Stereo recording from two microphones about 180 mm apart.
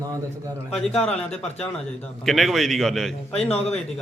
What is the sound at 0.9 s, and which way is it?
A man's voice, 5° left (ahead or behind).